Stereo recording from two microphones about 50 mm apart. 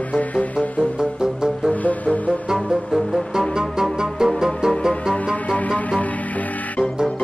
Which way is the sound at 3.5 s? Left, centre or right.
Centre.